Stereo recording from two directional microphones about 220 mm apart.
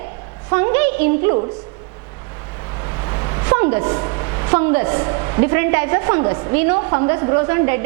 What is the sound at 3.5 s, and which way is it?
A woman's voice, 15° right (ahead or behind).